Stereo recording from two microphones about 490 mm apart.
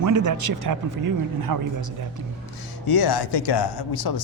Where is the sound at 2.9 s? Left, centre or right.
Left.